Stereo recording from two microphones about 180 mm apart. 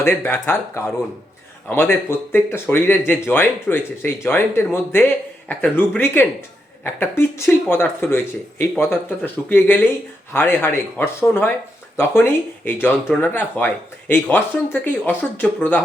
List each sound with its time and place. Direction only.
0.0 s speech: 15° left (ahead or behind)